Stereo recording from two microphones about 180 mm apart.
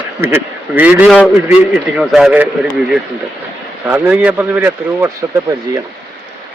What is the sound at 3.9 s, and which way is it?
A man's voice, 5° right (ahead or behind).